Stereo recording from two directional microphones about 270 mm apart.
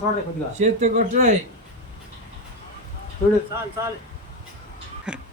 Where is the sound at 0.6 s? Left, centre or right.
Right.